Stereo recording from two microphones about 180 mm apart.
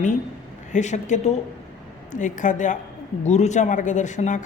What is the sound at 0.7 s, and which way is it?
A woman's voice, 40° left (ahead or behind).